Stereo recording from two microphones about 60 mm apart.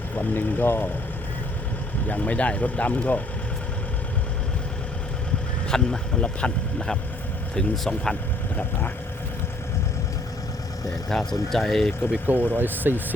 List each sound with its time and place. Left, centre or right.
0.2 s speech: left
2.0 s speech: left
5.6 s speech: centre
10.8 s speech: centre
12.2 s speech: right